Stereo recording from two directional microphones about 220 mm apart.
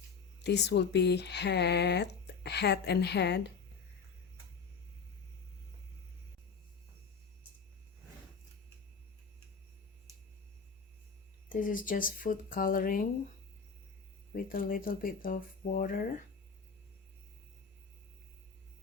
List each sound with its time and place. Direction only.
0.4 s speech: 50° left (ahead or behind)
11.4 s speech: 40° left (ahead or behind)
14.3 s speech: 40° left (ahead or behind)